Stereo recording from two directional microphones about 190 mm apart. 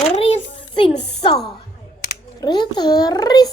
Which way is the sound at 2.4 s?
25° left (ahead or behind).